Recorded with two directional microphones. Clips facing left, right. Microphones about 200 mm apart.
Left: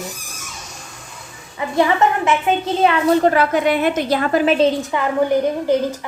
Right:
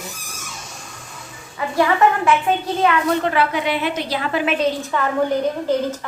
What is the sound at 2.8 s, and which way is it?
A woman's voice, 35° left (ahead or behind).